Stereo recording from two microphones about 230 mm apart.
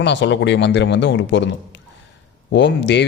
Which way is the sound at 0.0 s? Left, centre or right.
Left.